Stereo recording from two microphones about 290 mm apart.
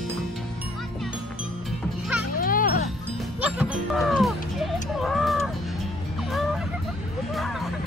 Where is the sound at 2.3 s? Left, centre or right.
Left.